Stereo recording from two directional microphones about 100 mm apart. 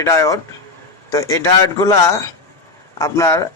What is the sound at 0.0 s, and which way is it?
Speech, 30° left (ahead or behind).